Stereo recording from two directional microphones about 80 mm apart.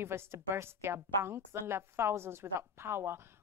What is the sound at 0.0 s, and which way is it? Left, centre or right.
A woman's voice, right.